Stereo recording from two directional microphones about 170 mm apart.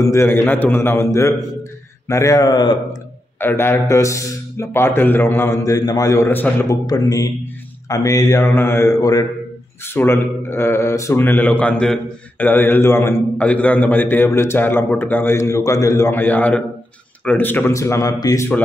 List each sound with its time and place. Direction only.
0.0 s speech: 15° left (ahead or behind)
3.3 s speech: 10° left (ahead or behind)